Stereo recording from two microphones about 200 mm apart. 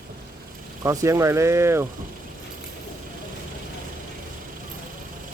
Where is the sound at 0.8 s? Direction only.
15° right (ahead or behind).